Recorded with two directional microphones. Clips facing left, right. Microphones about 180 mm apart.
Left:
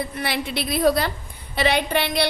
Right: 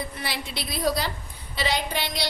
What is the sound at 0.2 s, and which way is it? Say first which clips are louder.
A woman's voice: left 7 dB; 60° left (ahead or behind).